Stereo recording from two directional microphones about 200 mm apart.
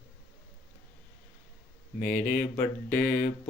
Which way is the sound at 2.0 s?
10° left (ahead or behind).